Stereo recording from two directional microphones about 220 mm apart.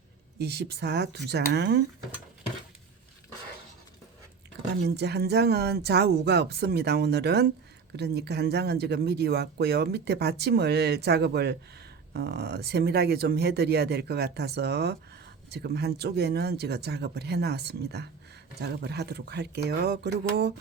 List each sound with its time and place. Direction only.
0.3 s speech: 45° right (ahead or behind)
4.8 s speech: 45° right (ahead or behind)